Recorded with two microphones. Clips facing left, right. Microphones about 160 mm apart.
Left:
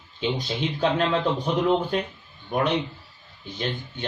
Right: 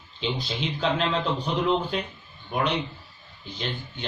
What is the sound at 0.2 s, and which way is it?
Speech, 50° left (ahead or behind).